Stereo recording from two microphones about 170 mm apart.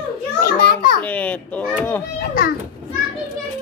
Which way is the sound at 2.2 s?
60° left (ahead or behind).